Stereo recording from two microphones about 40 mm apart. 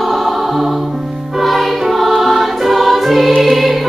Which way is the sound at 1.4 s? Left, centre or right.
Centre.